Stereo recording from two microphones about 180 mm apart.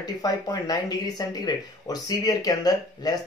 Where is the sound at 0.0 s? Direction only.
20° left (ahead or behind).